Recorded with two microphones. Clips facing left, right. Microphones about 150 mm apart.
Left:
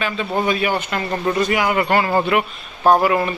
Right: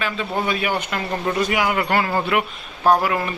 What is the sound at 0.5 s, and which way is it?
Speech, 5° right (ahead or behind).